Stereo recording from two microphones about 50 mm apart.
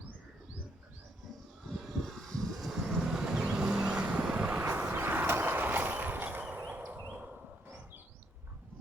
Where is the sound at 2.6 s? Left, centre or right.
Centre; by 4.6 s right.